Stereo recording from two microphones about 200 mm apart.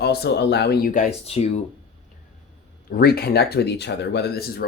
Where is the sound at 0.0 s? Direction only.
55° left (ahead or behind).